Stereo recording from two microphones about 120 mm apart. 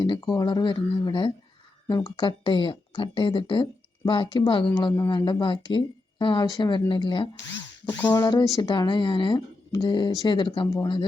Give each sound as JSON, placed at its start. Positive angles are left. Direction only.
{"t": 0.0, "sound": "speech", "side_deg": 40}
{"t": 7.9, "sound": "a sound", "side_deg": 15}
{"t": 8.1, "sound": "speech", "side_deg": 35}